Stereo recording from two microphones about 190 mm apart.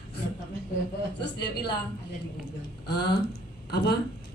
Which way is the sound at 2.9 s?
60° left (ahead or behind).